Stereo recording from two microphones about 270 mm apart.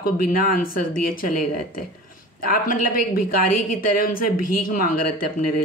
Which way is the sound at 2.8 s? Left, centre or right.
Left.